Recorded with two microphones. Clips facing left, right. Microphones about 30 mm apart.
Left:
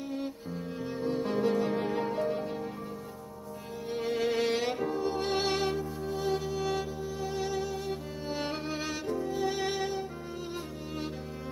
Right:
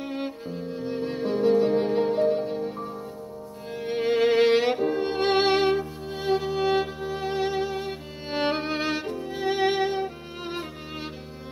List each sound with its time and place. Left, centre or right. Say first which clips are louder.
0.7 s music: right 6 dB; centre
0.9 s music: even; right
1.2 s music: right 9 dB; centre
3.8 s music: right 8 dB; right
5.0 s music: right 8 dB; right
8.3 s music: right 9 dB; right